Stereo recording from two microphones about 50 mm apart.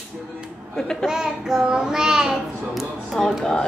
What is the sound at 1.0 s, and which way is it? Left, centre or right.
Child singing, centre.